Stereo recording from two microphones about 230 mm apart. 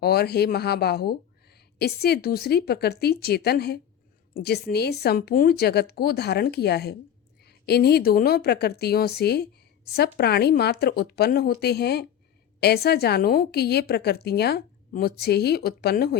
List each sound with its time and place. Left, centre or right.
0.0 s a woman's voice: left